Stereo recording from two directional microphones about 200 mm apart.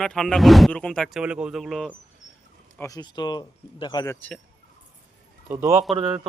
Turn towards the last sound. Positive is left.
turn(degrees=-5)  # may be behind; listen again after turning